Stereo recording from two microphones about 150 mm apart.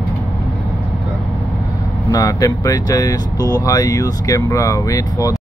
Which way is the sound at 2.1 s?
25° left (ahead or behind).